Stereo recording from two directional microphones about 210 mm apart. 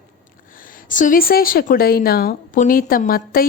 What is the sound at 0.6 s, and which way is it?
A woman's voice, 40° left (ahead or behind).